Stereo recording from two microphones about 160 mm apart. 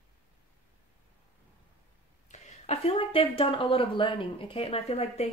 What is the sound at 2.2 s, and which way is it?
Speech, 45° left (ahead or behind).